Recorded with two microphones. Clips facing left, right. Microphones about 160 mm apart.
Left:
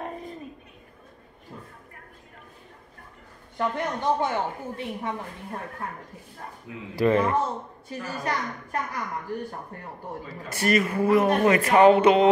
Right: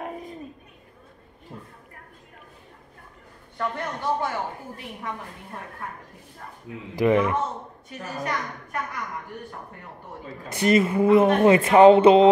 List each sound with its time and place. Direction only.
3.5 s a woman's voice: 20° left (ahead or behind)
6.7 s speech: 30° right (ahead or behind)
7.0 s speech: 15° right (ahead or behind)
7.9 s a woman's voice: 30° left (ahead or behind)
10.5 s speech: 20° right (ahead or behind)